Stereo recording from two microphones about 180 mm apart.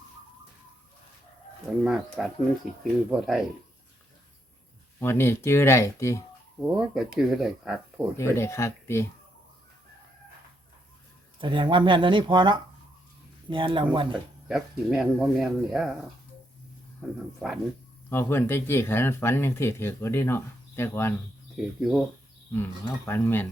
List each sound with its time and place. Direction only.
1.8 s speech: centre (ahead or behind)
4.9 s speech: 15° left (ahead or behind)
6.6 s speech: 5° right (ahead or behind)
8.1 s speech: 15° left (ahead or behind)
11.3 s speech: 25° right (ahead or behind)
14.4 s speech: centre (ahead or behind)
18.1 s speech: 15° left (ahead or behind)
21.5 s speech: centre (ahead or behind)
22.5 s speech: 10° left (ahead or behind)